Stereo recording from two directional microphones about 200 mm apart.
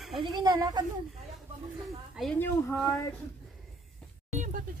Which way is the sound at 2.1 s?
Centre (ahead or behind).